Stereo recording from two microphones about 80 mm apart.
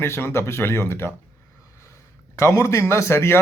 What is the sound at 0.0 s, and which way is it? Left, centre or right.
A man's voice, left.